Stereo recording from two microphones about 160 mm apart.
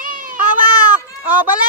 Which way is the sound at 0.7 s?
10° right (ahead or behind).